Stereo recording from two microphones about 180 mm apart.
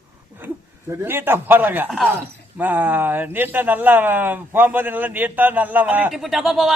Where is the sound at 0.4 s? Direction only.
10° right (ahead or behind).